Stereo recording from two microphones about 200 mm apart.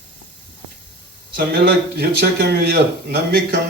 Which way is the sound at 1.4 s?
50° right (ahead or behind).